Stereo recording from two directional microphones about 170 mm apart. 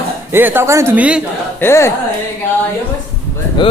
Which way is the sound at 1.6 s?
15° left (ahead or behind).